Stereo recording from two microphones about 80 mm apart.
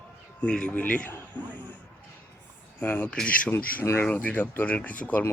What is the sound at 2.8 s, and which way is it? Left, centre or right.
Speech, centre.